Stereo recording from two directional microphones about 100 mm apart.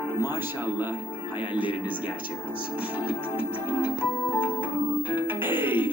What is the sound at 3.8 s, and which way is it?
Speech, 15° right (ahead or behind).